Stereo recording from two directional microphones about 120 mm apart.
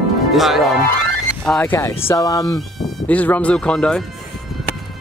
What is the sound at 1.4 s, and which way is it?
Speech, 10° left (ahead or behind).